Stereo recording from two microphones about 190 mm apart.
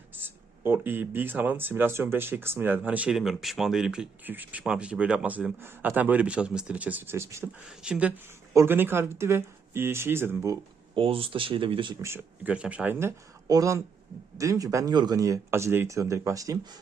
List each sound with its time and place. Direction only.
0.1 s speech: 10° right (ahead or behind)
10.9 s speech: 30° right (ahead or behind)
12.0 s speech: 10° right (ahead or behind)